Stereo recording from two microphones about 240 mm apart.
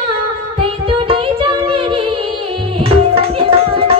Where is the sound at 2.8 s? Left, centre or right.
Right.